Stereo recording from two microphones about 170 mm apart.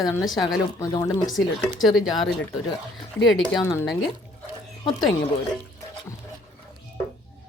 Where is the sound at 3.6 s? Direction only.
20° left (ahead or behind).